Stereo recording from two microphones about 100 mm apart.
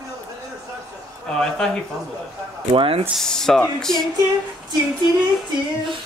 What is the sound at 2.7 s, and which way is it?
Speech, 65° right (ahead or behind).